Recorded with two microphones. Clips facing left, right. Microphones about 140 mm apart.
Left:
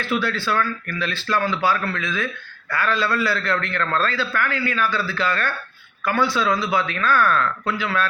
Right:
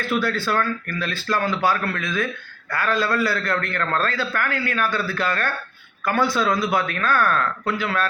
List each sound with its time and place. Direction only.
0.0 s speech: 45° right (ahead or behind)